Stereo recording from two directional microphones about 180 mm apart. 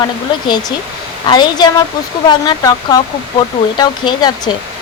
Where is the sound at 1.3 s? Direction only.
25° left (ahead or behind).